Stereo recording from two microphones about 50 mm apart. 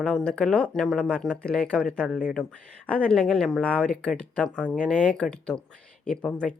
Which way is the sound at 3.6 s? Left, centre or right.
Left.